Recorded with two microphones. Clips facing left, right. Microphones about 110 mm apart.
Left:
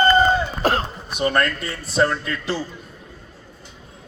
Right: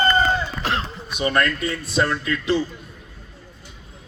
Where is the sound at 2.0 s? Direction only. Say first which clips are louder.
Left 2 dB; 35° left (ahead or behind).